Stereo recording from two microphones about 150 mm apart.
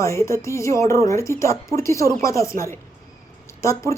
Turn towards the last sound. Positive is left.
turn(degrees=20)  # may be behind; listen again after turning